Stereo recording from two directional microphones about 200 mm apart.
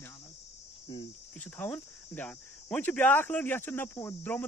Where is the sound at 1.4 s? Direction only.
10° left (ahead or behind).